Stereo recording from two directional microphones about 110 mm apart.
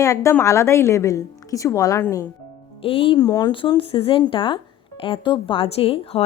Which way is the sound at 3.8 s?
55° left (ahead or behind).